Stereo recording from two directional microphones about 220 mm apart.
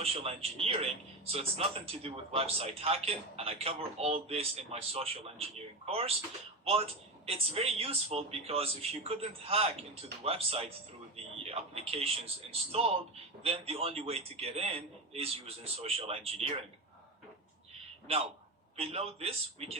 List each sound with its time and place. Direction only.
0.0 s a man's voice: 25° right (ahead or behind)
7.3 s a man's voice: 25° right (ahead or behind)
18.8 s a man's voice: 25° right (ahead or behind)